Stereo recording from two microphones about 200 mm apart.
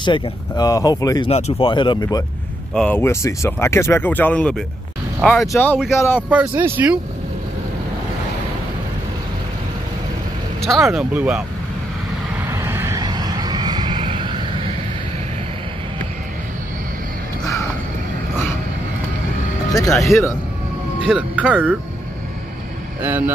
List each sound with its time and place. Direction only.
0.0 s speech: 20° left (ahead or behind)
2.7 s speech: 5° left (ahead or behind)
6.3 s speech: 10° right (ahead or behind)
10.6 s speech: centre (ahead or behind)
12.4 s vehicle: 10° right (ahead or behind)
19.9 s speech: centre (ahead or behind)
23.0 s speech: 10° right (ahead or behind)